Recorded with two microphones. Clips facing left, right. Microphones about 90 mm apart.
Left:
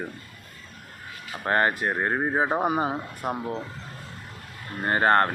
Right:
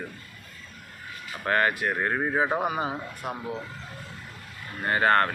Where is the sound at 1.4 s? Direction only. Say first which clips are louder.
Left 1 dB; 30° left (ahead or behind).